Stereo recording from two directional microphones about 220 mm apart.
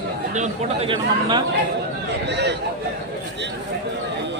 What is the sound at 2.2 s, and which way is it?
Speech, 50° right (ahead or behind).